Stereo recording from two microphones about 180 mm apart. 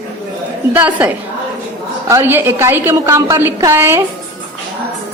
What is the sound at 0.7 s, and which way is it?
A man's voice, 10° right (ahead or behind).